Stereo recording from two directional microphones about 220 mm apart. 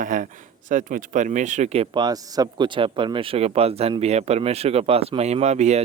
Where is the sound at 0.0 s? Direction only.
40° right (ahead or behind).